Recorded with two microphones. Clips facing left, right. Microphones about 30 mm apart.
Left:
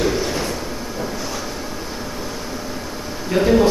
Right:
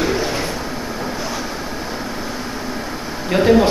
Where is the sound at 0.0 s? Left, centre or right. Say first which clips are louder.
Right 1 dB; centre.